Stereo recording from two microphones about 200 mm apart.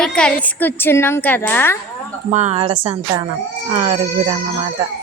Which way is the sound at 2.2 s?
35° right (ahead or behind).